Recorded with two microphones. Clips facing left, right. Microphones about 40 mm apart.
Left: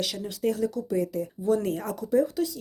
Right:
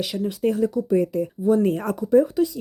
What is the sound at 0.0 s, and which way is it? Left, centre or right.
Speech, right.